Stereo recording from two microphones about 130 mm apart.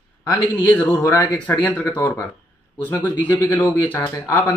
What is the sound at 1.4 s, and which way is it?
Speech, 10° left (ahead or behind).